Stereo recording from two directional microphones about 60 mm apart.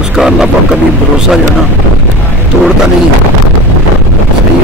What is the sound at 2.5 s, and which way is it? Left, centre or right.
Speech, centre.